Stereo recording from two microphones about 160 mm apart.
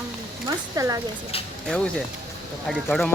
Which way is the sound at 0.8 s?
20° right (ahead or behind).